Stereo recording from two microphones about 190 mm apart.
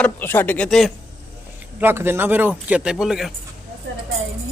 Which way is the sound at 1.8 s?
10° right (ahead or behind).